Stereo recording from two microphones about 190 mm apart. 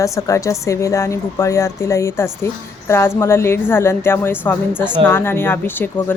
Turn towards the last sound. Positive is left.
turn(degrees=10)  # may be behind; listen again after turning